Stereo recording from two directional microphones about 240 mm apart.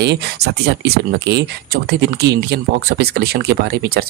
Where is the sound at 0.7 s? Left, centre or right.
Right.